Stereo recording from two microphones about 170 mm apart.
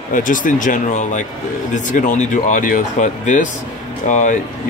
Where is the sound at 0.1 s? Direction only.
50° left (ahead or behind).